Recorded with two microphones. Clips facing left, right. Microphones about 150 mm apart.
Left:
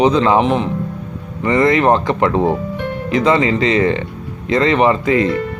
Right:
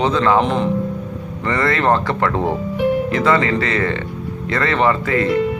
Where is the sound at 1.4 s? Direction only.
20° left (ahead or behind).